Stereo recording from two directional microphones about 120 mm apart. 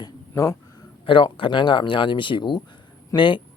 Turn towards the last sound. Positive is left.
turn(degrees=40)  # may be behind; listen again after turning